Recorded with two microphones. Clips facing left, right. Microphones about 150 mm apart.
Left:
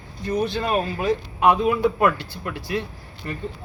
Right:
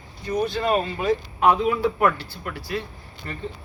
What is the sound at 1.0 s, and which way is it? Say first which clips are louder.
Speech: even; 10° left (ahead or behind).